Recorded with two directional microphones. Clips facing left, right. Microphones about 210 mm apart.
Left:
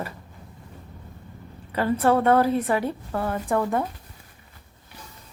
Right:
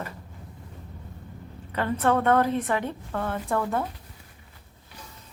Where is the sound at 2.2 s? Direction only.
10° left (ahead or behind).